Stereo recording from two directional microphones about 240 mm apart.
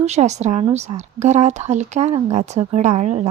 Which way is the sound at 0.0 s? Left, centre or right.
Right.